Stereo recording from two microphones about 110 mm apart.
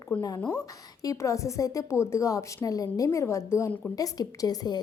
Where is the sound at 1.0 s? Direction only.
30° left (ahead or behind).